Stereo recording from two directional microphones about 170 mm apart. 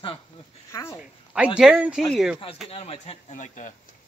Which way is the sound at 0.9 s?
5° right (ahead or behind).